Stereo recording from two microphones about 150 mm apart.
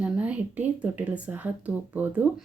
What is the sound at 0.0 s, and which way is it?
Speech, 10° right (ahead or behind).